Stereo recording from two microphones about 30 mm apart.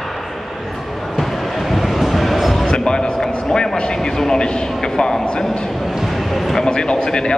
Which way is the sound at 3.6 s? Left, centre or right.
Left.